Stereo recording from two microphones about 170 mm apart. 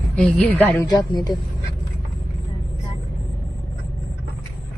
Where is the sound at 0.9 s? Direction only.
25° left (ahead or behind).